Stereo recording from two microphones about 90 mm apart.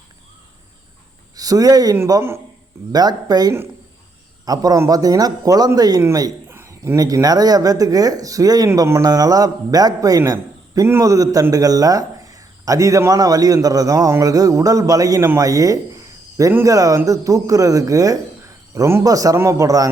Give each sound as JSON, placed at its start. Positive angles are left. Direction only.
{"t": 1.4, "sound": "speech", "side_deg": -45}
{"t": 6.5, "sound": "speech", "side_deg": -30}
{"t": 11.0, "sound": "a man's voice", "side_deg": -40}